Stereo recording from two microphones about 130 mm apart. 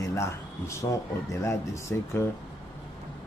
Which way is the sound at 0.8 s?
25° left (ahead or behind).